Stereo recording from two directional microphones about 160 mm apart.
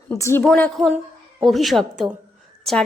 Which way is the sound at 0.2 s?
15° left (ahead or behind).